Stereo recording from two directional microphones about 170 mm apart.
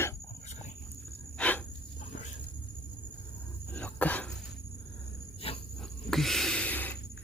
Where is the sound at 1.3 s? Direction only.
10° left (ahead or behind).